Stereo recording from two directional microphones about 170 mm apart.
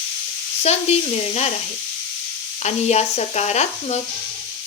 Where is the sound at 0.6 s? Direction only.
40° left (ahead or behind).